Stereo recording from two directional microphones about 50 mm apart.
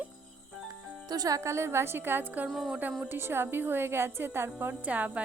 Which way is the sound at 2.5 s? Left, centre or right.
Centre.